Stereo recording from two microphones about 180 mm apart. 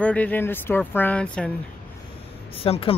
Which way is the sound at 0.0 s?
5° left (ahead or behind).